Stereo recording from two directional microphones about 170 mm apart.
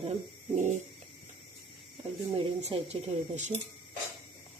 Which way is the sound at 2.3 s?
35° right (ahead or behind).